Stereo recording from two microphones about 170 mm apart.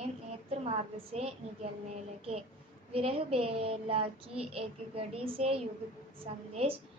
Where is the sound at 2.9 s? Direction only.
35° right (ahead or behind).